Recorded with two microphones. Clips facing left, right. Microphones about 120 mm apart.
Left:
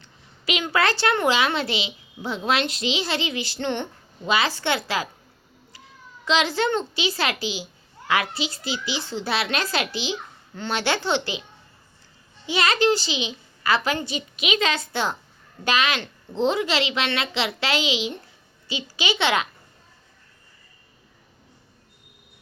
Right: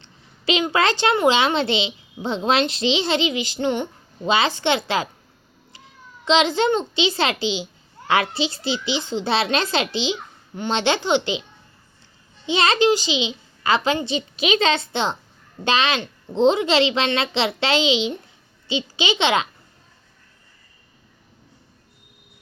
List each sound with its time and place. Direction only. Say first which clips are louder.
0.0 s a child's voice: right 6 dB; 25° right (ahead or behind)
6.2 s a child's voice: right 4 dB; 25° right (ahead or behind)
12.5 s a child's voice: right 3 dB; 25° right (ahead or behind)